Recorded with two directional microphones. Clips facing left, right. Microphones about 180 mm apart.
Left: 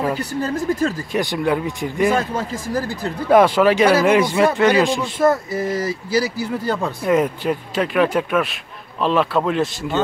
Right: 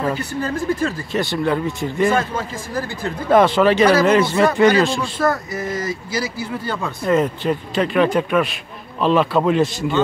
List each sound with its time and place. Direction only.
0.2 s speech: 35° left (ahead or behind)
1.1 s speech: 15° left (ahead or behind)
2.1 s speech: 40° left (ahead or behind)
3.3 s speech: 10° left (ahead or behind)
4.8 s speech: 20° left (ahead or behind); by 6.9 s 40° left (ahead or behind)
7.1 s speech: 10° left (ahead or behind)